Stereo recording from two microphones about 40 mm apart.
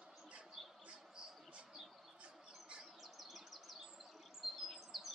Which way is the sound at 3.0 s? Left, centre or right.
Centre.